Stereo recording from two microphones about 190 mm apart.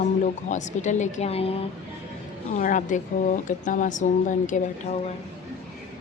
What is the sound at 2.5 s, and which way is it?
A woman's voice, 45° left (ahead or behind).